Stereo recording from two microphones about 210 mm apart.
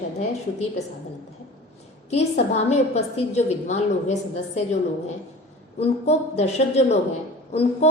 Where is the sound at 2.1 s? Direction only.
30° left (ahead or behind).